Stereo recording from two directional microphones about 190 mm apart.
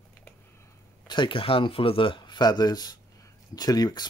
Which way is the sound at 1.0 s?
25° left (ahead or behind).